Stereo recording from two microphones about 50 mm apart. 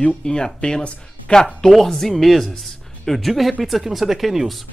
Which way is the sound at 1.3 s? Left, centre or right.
Centre.